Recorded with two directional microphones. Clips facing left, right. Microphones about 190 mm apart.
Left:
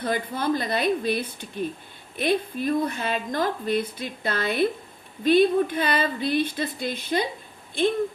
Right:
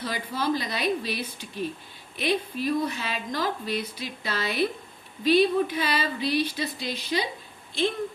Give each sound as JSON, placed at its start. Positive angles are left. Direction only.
{"t": 0.0, "sound": "speech", "side_deg": 55}